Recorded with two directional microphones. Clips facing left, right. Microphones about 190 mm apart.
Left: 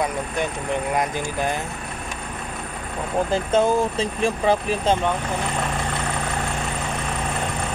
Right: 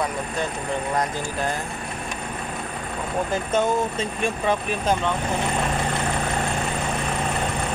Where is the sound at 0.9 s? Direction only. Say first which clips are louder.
Left 1 dB; 15° left (ahead or behind).